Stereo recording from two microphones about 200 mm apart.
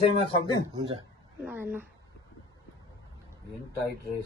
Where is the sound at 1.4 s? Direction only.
10° right (ahead or behind).